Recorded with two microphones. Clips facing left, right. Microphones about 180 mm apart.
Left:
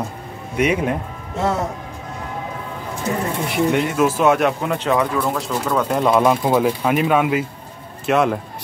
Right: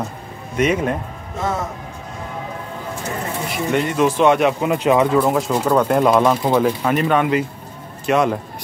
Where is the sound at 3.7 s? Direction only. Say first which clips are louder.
Right 1 dB; 5° left (ahead or behind); by 4.9 s 10° right (ahead or behind).